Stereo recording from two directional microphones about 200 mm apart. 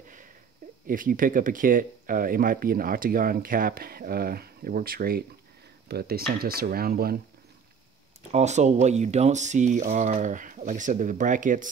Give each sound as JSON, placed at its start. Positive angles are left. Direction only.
{"t": 0.8, "sound": "speech", "side_deg": -45}
{"t": 8.3, "sound": "speech", "side_deg": -35}